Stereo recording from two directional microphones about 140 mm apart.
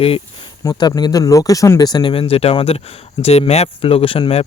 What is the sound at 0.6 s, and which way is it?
Speech, 30° left (ahead or behind).